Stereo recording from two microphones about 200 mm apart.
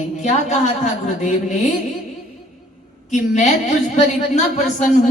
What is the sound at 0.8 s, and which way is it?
Speech, 35° left (ahead or behind).